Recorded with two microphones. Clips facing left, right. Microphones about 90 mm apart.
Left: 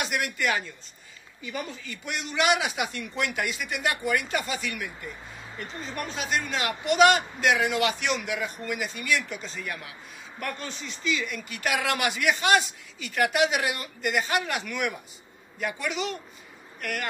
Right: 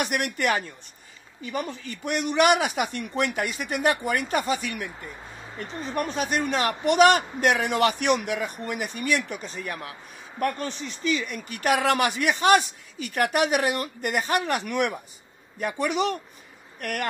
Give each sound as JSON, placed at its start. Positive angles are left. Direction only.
{"t": 0.0, "sound": "a man's voice", "side_deg": -55}
{"t": 5.9, "sound": "a man's voice", "side_deg": -45}
{"t": 9.7, "sound": "a man's voice", "side_deg": -40}